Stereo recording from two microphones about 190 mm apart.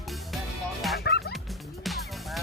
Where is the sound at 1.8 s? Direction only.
Centre (ahead or behind).